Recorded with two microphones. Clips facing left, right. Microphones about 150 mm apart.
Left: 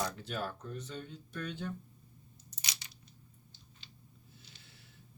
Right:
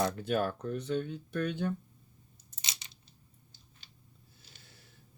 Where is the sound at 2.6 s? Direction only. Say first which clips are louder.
Even; 20° right (ahead or behind).